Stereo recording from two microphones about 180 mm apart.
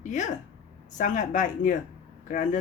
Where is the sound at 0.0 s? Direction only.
45° left (ahead or behind).